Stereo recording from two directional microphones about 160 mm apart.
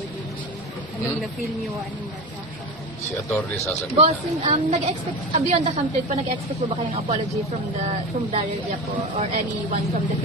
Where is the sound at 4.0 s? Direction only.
40° right (ahead or behind).